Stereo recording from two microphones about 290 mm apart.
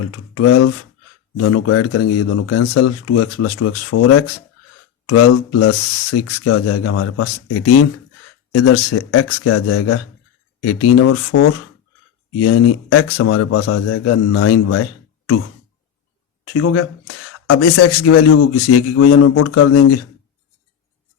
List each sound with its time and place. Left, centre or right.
0.1 s speech: left
12.4 s speech: left
16.4 s speech: left